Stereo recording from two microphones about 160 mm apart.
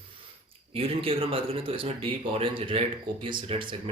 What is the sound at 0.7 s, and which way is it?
Speech, 35° right (ahead or behind).